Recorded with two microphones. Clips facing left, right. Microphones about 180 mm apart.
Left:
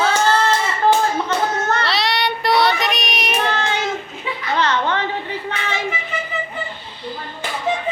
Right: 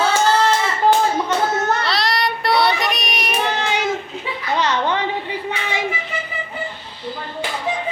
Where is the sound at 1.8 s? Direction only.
Centre (ahead or behind).